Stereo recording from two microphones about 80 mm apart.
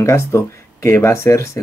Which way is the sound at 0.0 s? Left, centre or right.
Left.